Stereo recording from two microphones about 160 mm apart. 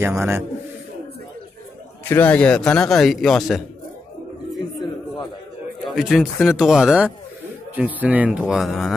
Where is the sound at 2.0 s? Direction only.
10° left (ahead or behind).